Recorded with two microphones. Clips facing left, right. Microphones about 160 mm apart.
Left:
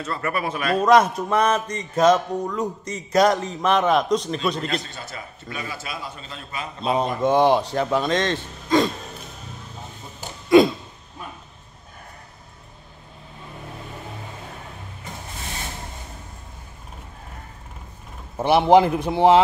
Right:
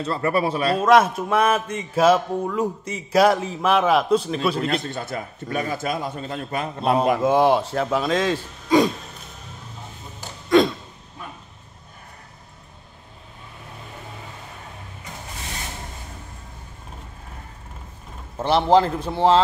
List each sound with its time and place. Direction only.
0.0 s a man's voice: 30° right (ahead or behind)
0.7 s a man's voice: centre (ahead or behind)
4.6 s a man's voice: 55° right (ahead or behind)
7.2 s a man's voice: 5° right (ahead or behind)
10.5 s a sound: 5° left (ahead or behind)
18.4 s a man's voice: 15° left (ahead or behind)